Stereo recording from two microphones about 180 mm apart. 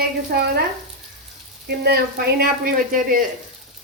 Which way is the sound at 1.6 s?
60° right (ahead or behind).